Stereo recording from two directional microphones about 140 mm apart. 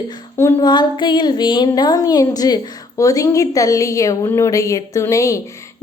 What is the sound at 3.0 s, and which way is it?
A woman's voice, 25° left (ahead or behind).